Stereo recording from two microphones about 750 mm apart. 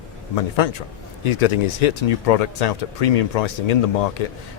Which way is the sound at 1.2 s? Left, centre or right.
Left.